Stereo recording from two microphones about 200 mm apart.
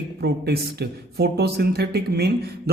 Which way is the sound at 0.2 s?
55° right (ahead or behind).